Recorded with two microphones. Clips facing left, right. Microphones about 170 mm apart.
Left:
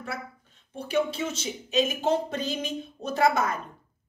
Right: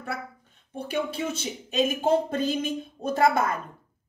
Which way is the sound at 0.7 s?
55° right (ahead or behind).